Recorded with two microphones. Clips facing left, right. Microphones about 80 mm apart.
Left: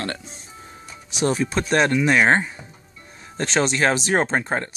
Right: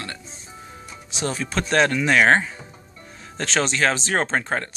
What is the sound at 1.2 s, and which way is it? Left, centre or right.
Speech, centre.